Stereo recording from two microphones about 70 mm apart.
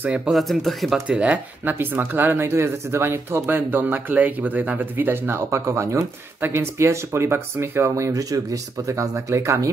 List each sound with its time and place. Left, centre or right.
0.3 s speech: centre
1.0 s speech: centre
2.4 s speech: right
7.9 s speech: right